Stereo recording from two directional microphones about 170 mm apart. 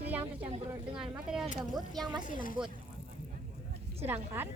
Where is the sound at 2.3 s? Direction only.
55° left (ahead or behind).